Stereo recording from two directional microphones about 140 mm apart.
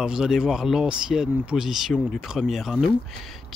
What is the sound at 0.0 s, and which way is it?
Speech, 5° right (ahead or behind).